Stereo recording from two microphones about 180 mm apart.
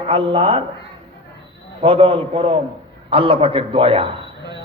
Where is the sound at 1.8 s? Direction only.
30° right (ahead or behind).